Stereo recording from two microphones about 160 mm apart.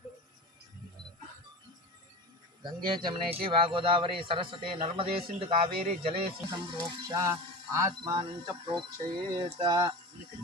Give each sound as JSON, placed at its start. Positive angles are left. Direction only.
{"t": 3.0, "sound": "speech", "side_deg": -30}
{"t": 6.7, "sound": "speech", "side_deg": -20}